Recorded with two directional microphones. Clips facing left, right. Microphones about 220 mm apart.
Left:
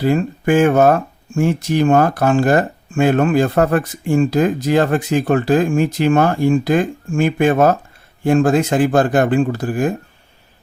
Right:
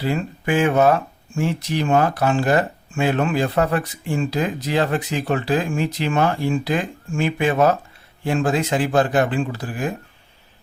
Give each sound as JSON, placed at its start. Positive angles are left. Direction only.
{"t": 0.0, "sound": "speech", "side_deg": 45}